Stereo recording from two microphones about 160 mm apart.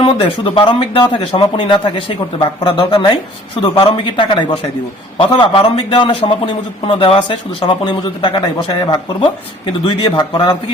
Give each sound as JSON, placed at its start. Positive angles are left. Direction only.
{"t": 0.0, "sound": "a man's voice", "side_deg": 30}